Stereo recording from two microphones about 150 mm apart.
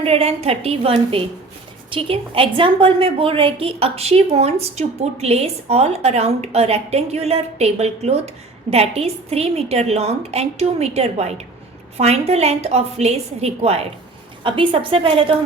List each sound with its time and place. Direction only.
0.0 s a woman's voice: 40° right (ahead or behind)